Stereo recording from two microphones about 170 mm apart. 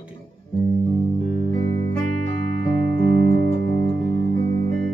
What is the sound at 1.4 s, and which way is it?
Music, 45° right (ahead or behind).